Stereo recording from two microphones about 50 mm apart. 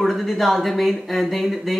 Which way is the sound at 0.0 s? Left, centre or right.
Centre.